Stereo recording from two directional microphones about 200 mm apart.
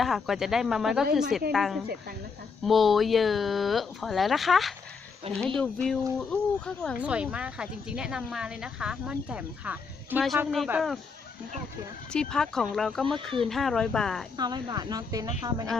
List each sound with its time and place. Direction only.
0.0 s speech: centre (ahead or behind)
12.1 s speech: 5° left (ahead or behind)
14.3 s speech: 20° right (ahead or behind)